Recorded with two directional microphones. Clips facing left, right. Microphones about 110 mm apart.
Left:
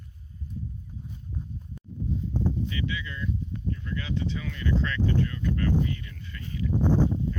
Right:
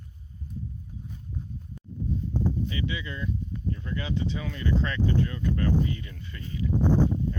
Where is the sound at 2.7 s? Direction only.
25° right (ahead or behind).